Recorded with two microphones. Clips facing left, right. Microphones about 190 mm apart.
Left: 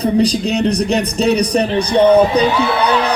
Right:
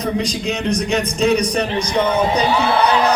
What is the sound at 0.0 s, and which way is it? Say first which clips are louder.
A man's voice: left 6 dB; 35° left (ahead or behind).